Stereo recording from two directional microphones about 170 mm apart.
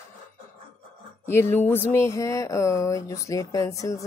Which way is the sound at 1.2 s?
15° left (ahead or behind).